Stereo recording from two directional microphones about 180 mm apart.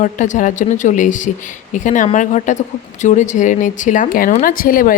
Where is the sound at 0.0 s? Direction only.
45° left (ahead or behind).